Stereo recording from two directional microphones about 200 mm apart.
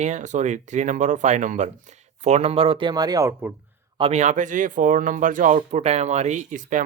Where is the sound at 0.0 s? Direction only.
35° right (ahead or behind); by 3.5 s 15° right (ahead or behind).